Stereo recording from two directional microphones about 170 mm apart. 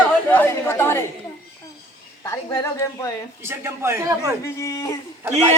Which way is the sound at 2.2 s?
15° left (ahead or behind).